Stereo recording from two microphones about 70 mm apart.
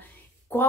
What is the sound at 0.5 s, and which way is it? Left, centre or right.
Speech, left.